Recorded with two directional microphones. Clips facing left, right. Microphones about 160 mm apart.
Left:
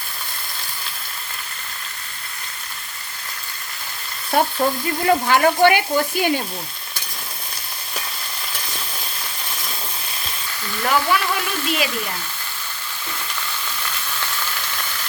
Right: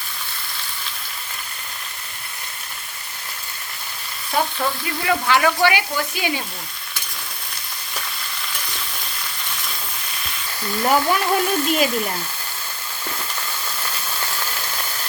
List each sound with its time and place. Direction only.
4.6 s speech: 40° left (ahead or behind)
5.6 s stir: 50° left (ahead or behind)
10.8 s speech: 40° right (ahead or behind)